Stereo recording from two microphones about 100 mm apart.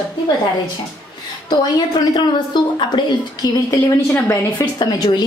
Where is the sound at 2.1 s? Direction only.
50° left (ahead or behind).